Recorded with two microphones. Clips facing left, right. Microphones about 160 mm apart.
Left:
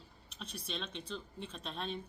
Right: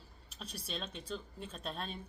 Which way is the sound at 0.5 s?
40° right (ahead or behind).